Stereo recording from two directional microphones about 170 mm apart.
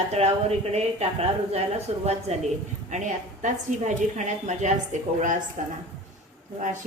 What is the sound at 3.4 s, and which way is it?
A woman's voice, 45° right (ahead or behind).